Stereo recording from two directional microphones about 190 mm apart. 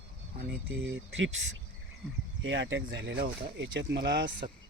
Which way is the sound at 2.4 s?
80° right.